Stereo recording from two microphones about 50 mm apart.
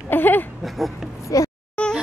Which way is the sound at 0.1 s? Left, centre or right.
Left.